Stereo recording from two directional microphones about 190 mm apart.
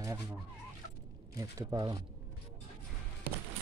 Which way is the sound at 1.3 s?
20° right (ahead or behind).